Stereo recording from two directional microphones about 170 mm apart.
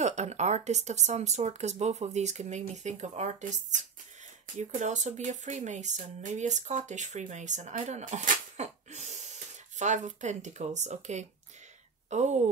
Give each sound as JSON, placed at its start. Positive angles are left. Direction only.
{"t": 0.0, "sound": "speech", "side_deg": -40}